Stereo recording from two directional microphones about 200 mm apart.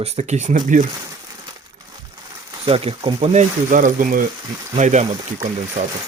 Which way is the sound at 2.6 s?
25° right (ahead or behind).